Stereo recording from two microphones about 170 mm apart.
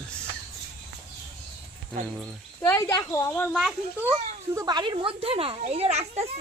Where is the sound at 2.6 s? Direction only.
15° left (ahead or behind).